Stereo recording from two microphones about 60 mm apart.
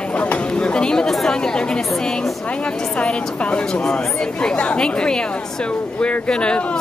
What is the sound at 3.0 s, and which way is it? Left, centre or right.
Speech, centre.